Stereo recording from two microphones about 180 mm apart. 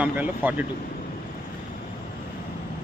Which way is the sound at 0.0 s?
10° right (ahead or behind).